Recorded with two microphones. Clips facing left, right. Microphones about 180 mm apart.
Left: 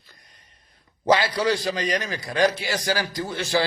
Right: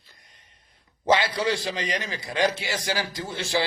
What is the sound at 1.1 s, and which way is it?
Speech, 25° right (ahead or behind).